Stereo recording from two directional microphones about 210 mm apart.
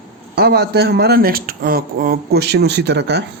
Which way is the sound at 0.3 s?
50° right (ahead or behind).